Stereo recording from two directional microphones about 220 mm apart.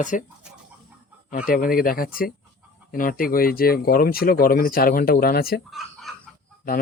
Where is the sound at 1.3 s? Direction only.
40° left (ahead or behind).